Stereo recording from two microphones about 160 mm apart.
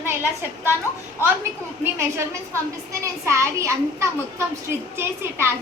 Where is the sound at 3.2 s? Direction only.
20° right (ahead or behind).